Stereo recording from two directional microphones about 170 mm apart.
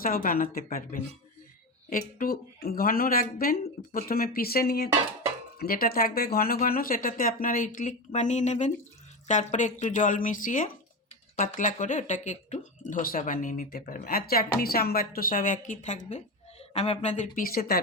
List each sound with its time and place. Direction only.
0.0 s speech: 55° left (ahead or behind)